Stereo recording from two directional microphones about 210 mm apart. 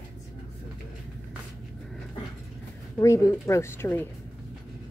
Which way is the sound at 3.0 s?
15° left (ahead or behind).